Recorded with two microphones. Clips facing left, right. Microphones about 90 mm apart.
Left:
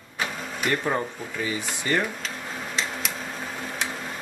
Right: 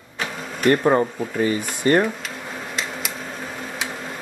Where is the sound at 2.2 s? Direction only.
5° right (ahead or behind).